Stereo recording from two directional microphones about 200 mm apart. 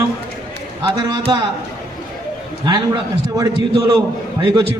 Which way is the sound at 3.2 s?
15° right (ahead or behind).